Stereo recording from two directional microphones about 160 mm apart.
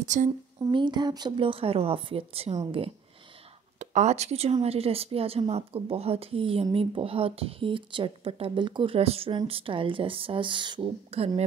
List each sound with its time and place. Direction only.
0.0 s speech: 50° right (ahead or behind)
0.7 s a woman's voice: 30° right (ahead or behind)
3.8 s a woman's voice: 45° right (ahead or behind)